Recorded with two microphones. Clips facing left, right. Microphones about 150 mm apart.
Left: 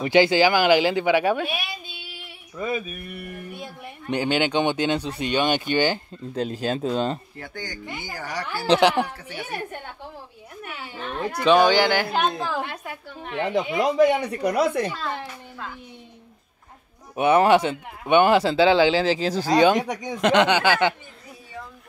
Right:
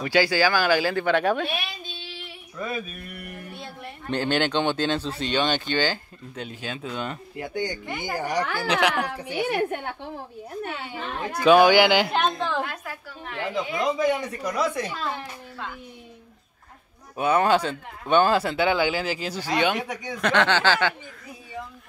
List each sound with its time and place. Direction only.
0.0 s speech: 20° left (ahead or behind)
6.3 s speech: 35° left (ahead or behind)
7.3 s speech: 15° right (ahead or behind)
7.9 s speech: 50° right (ahead or behind)
8.2 s speech: 20° right (ahead or behind)
8.6 s speech: 30° left (ahead or behind)
9.5 s a woman's voice: 70° right (ahead or behind)
11.3 s speech: 5° right (ahead or behind)
12.1 s a woman's voice: 5° left (ahead or behind)
12.6 s speech: 20° left (ahead or behind)
13.8 s speech: 65° left (ahead or behind)
17.1 s speech: 25° left (ahead or behind); by 20.1 s 40° left (ahead or behind)
20.1 s speech: 20° left (ahead or behind)